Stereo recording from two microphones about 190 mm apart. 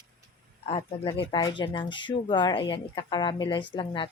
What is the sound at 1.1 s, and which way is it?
Speech, 25° left (ahead or behind).